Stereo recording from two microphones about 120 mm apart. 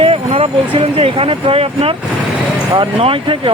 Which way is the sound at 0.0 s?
50° right (ahead or behind).